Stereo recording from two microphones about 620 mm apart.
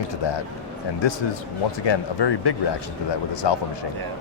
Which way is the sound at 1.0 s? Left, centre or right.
Left.